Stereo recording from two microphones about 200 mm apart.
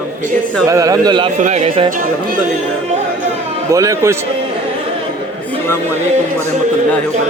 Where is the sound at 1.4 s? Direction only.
35° right (ahead or behind).